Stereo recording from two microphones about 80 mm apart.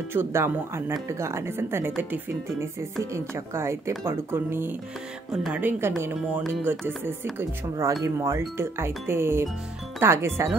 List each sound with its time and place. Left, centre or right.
0.1 s speech: right
2.8 s speech: right
8.0 s speech: right